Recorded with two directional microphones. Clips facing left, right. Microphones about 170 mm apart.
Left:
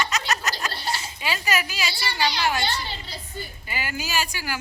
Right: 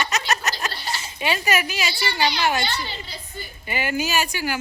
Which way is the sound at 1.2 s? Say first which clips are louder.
Right 5 dB; 20° right (ahead or behind).